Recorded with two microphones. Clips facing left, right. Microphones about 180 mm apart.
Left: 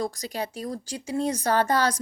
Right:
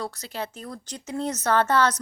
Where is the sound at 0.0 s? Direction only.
15° left (ahead or behind).